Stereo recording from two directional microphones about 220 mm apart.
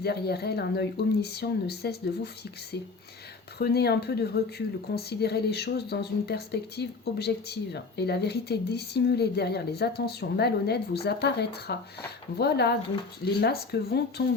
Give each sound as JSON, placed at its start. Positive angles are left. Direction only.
{"t": 0.0, "sound": "speech", "side_deg": 45}
{"t": 3.6, "sound": "speech", "side_deg": 45}